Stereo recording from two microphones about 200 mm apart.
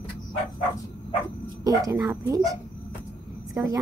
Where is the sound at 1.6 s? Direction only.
20° right (ahead or behind).